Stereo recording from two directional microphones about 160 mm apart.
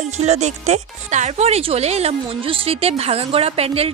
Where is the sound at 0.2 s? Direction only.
45° right (ahead or behind).